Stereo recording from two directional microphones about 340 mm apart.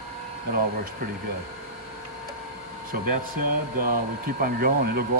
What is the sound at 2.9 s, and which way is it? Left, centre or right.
Speech, right.